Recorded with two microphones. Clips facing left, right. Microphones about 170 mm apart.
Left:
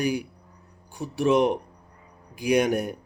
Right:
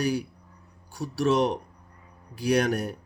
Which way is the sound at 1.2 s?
15° left (ahead or behind).